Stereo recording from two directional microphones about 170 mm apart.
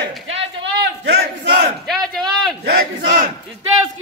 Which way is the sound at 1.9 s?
Centre (ahead or behind).